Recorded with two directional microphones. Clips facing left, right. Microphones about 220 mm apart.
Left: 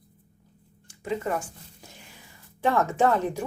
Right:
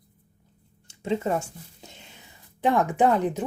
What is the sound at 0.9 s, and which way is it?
Speech, 25° right (ahead or behind).